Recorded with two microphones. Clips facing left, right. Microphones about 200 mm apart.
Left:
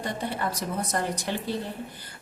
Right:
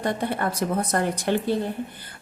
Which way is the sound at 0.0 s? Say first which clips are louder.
Right 5 dB; 55° right (ahead or behind).